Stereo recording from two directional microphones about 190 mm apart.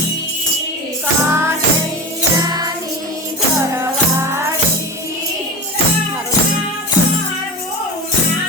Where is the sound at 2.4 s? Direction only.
20° right (ahead or behind).